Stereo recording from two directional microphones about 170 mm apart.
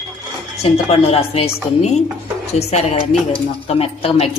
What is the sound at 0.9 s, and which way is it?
Speech, 35° left (ahead or behind).